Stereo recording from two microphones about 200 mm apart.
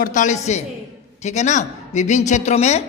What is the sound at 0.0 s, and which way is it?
A woman's voice, 40° left (ahead or behind).